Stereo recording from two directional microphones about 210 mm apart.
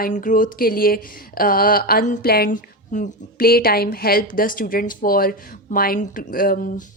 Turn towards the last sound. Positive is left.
turn(degrees=40)  # may be behind; listen again after turning